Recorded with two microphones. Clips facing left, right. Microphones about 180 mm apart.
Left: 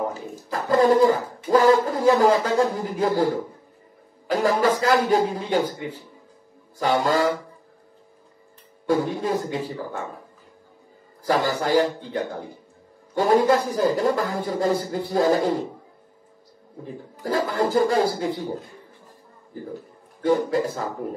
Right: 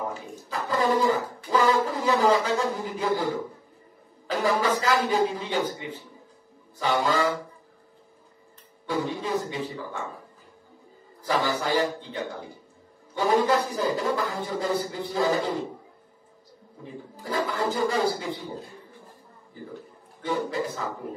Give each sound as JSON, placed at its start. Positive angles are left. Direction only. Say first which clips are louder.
{"t": 0.5, "sound": "speech", "louder": "left 7 dB", "side_deg": 45}
{"t": 4.3, "sound": "speech", "louder": "left 4 dB", "side_deg": 45}
{"t": 8.8, "sound": "speech", "louder": "left 6 dB", "side_deg": 45}
{"t": 11.2, "sound": "speech", "louder": "left 4 dB", "side_deg": 45}
{"t": 17.2, "sound": "speech", "louder": "left 5 dB", "side_deg": 45}
{"t": 20.2, "sound": "speech", "louder": "left 7 dB", "side_deg": 45}